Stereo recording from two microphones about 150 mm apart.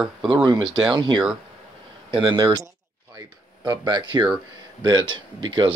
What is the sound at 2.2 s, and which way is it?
Speech, 30° right (ahead or behind).